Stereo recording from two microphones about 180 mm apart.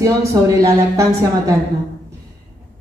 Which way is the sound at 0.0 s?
15° right (ahead or behind).